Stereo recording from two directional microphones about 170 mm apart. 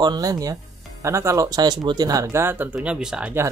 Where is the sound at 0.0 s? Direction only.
25° right (ahead or behind); by 3.4 s 5° right (ahead or behind).